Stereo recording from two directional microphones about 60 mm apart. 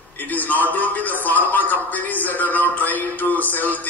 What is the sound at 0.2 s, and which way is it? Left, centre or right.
A man's voice, left.